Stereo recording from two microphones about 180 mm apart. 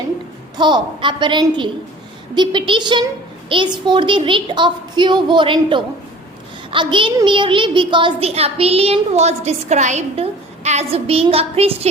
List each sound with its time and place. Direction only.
0.5 s a woman's voice: 25° right (ahead or behind)